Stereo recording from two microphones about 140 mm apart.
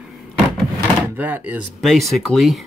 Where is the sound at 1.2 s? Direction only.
15° right (ahead or behind).